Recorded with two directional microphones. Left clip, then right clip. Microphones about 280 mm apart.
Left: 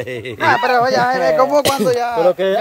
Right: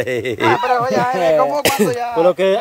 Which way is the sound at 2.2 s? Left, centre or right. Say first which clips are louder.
Right 3 dB; right.